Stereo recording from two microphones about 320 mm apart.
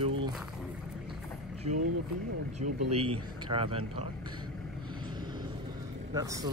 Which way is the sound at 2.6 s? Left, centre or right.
Centre.